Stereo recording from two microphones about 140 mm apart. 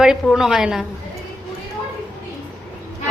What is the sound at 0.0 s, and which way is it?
Speech, 5° right (ahead or behind).